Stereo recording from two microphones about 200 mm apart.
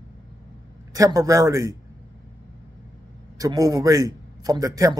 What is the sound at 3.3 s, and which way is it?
A man's voice, 20° right (ahead or behind).